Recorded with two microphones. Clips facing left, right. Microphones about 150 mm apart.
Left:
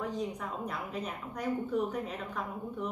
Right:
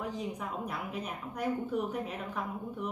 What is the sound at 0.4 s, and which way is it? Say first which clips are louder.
A woman's voice: even; 5° right (ahead or behind).